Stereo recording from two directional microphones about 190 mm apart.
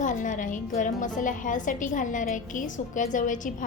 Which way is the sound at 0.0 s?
40° left (ahead or behind).